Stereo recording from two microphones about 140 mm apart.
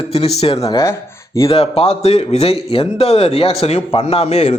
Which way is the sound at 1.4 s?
45° left (ahead or behind).